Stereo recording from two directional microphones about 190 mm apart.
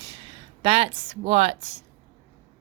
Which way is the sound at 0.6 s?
30° right (ahead or behind).